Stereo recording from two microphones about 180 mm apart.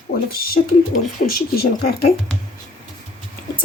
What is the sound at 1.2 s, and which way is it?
Speech, 60° left (ahead or behind).